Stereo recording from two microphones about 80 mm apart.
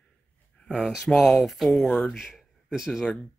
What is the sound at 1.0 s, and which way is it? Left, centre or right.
Speech, centre.